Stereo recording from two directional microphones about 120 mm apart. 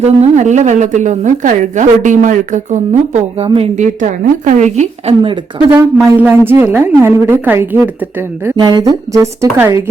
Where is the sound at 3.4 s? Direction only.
50° right (ahead or behind).